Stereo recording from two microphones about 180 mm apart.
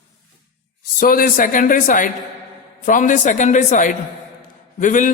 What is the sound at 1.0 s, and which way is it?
A man's voice, 55° left (ahead or behind).